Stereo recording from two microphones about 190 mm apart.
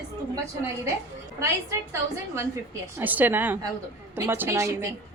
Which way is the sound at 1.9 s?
15° right (ahead or behind).